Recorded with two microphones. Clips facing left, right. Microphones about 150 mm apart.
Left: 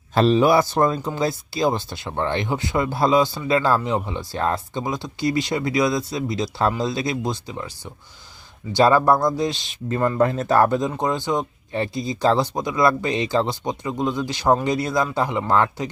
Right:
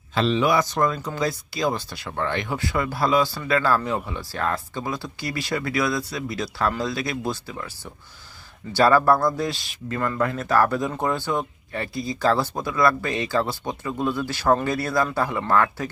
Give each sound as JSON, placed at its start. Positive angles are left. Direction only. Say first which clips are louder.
{"t": 0.1, "sound": "speech", "louder": "left 5 dB", "side_deg": 40}
{"t": 8.7, "sound": "speech", "louder": "left 1 dB", "side_deg": 20}